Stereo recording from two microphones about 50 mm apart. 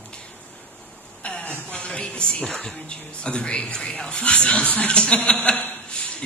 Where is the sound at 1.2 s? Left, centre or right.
Left.